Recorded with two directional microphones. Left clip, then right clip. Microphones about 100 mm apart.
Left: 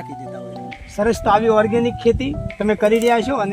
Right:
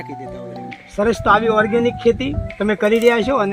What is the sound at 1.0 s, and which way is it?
Speech, 50° left (ahead or behind).